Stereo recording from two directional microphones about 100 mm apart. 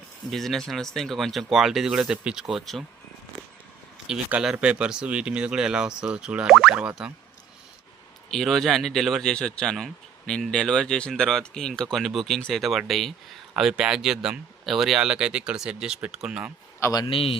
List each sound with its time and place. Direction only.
0.3 s a man's voice: centre (ahead or behind)
4.0 s a man's voice: 10° right (ahead or behind)
8.3 s a man's voice: 5° left (ahead or behind)
17.1 s speech: 65° left (ahead or behind)